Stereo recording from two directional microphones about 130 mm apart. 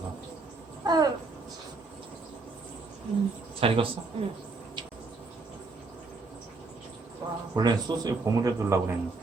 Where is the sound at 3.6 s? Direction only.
45° right (ahead or behind).